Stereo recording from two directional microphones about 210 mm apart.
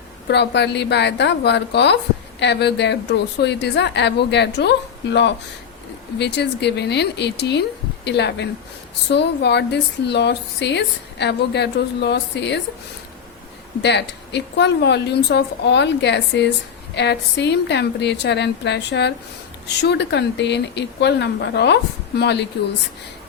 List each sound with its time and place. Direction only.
0.3 s a woman's voice: 55° left (ahead or behind)
13.8 s a woman's voice: 55° left (ahead or behind)